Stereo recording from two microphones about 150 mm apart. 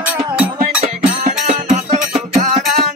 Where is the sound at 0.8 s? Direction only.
50° right (ahead or behind).